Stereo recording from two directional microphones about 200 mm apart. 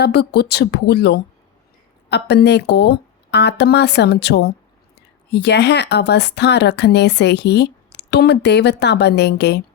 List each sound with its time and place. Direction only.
0.0 s speech: 55° left (ahead or behind)